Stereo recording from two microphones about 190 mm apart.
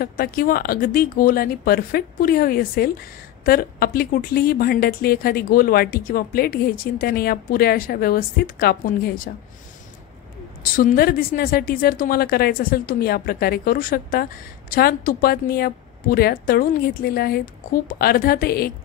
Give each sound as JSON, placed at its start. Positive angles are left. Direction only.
{"t": 0.0, "sound": "a woman's voice", "side_deg": 50}
{"t": 10.8, "sound": "a woman's voice", "side_deg": 50}